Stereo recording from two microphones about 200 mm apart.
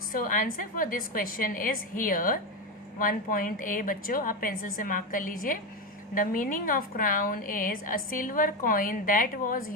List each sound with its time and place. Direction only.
0.1 s a woman's voice: 40° left (ahead or behind)